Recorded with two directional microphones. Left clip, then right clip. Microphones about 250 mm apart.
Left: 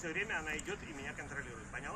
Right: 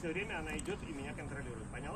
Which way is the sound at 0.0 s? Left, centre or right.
Centre.